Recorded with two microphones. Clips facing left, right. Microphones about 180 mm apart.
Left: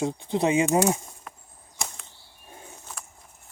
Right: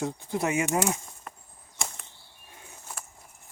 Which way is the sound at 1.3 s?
Centre (ahead or behind).